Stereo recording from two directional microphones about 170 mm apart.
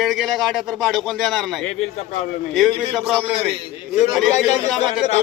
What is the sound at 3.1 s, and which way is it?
Speech, 35° right (ahead or behind).